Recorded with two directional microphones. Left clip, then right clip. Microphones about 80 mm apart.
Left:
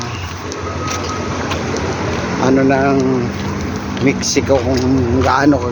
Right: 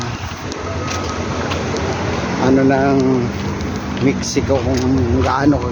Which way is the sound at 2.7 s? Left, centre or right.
Right.